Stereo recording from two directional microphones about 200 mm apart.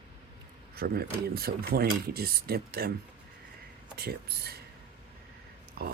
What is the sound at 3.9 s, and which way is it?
Speech, 55° right (ahead or behind).